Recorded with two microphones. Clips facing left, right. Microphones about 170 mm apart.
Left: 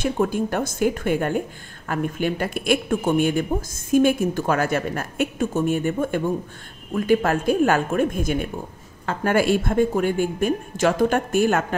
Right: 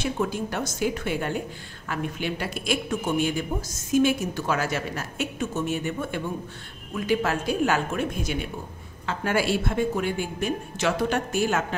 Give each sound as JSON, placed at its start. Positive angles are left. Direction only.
{"t": 0.0, "sound": "speech", "side_deg": 50}